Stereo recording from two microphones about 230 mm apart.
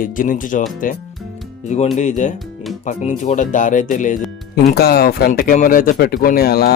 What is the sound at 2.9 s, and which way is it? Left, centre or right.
Speech, left.